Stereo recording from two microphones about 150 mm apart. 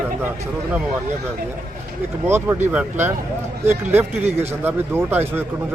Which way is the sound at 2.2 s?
15° right (ahead or behind).